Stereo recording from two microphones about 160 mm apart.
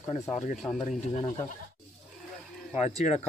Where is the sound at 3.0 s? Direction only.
40° left (ahead or behind).